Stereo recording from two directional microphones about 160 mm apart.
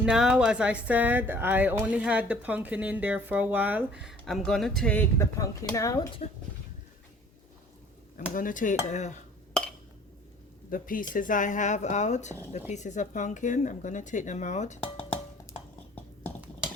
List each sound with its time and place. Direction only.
0.0 s speech: 5° right (ahead or behind)
5.4 s speech: 20° left (ahead or behind)
6.2 s speech: 50° left (ahead or behind)
8.4 s speech: 55° left (ahead or behind)
10.7 s speech: 60° left (ahead or behind)